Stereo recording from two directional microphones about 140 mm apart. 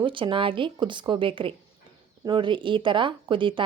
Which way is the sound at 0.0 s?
35° right (ahead or behind).